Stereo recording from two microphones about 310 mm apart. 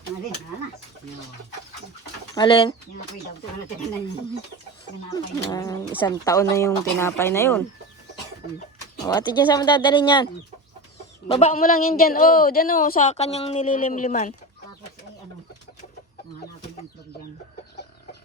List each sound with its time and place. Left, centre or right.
2.3 s speech: centre
5.1 s speech: centre
9.0 s speech: centre
11.3 s a woman's voice: centre